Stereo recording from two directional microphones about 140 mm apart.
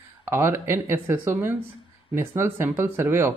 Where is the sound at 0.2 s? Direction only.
20° right (ahead or behind).